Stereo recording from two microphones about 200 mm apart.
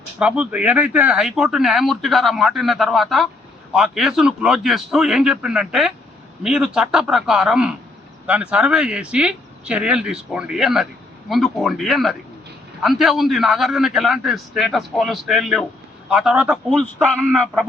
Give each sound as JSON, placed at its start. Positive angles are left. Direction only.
{"t": 0.2, "sound": "speech", "side_deg": -5}